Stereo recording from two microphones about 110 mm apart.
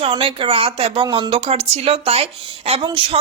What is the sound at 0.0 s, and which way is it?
A woman's voice, 55° right (ahead or behind).